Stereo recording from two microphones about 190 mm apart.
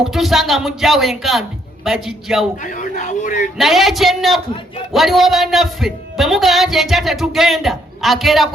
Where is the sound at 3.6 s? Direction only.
Centre (ahead or behind).